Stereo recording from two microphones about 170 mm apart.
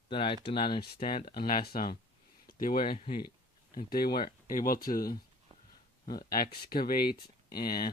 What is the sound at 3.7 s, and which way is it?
Speech, 60° left (ahead or behind).